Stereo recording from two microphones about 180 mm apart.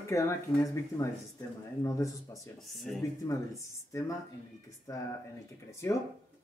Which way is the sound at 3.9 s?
20° left (ahead or behind).